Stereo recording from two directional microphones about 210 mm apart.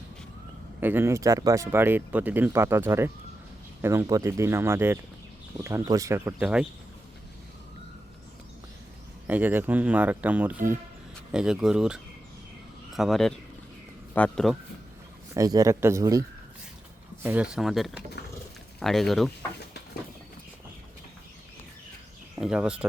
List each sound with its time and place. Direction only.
0.8 s speech: 10° right (ahead or behind)
9.2 s speech: 10° right (ahead or behind)
15.4 s speech: 15° right (ahead or behind)
17.2 s speech: 5° right (ahead or behind)
22.4 s speech: 5° right (ahead or behind)